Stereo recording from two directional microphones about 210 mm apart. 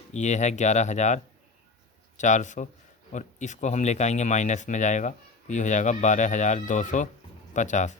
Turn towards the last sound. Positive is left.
turn(degrees=35)  # may be behind; listen again after turning